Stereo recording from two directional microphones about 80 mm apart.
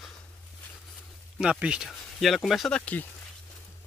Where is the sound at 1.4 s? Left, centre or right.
Centre.